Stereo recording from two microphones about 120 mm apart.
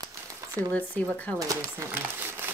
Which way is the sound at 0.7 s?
10° left (ahead or behind).